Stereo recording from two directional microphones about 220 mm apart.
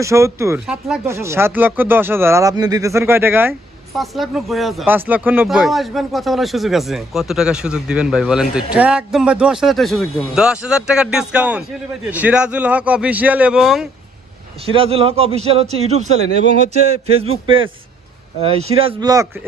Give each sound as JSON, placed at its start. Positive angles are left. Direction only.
{"t": 0.0, "sound": "speech", "side_deg": -15}
{"t": 14.7, "sound": "a man's voice", "side_deg": -25}